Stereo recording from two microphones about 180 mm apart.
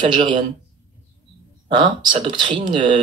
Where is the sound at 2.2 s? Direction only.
25° right (ahead or behind).